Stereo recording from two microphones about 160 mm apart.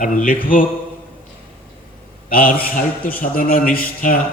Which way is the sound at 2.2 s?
60° left (ahead or behind).